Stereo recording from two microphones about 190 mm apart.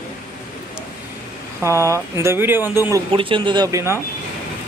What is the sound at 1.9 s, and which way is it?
Speech, 15° right (ahead or behind).